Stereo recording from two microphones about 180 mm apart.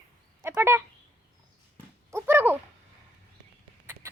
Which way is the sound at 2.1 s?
15° right (ahead or behind).